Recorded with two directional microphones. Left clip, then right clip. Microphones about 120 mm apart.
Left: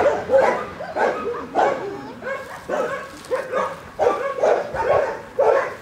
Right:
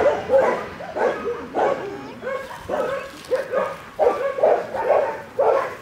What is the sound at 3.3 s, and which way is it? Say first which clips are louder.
Dog: right 1 dB; 35° left (ahead or behind).